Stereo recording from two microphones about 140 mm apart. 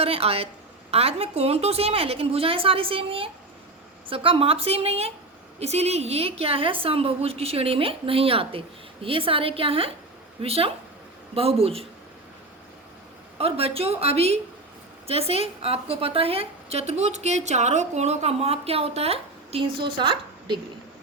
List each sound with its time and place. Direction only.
0.0 s a woman's voice: 45° right (ahead or behind)
13.4 s a woman's voice: 45° right (ahead or behind)